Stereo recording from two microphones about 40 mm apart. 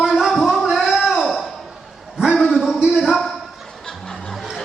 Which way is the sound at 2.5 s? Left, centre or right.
Centre.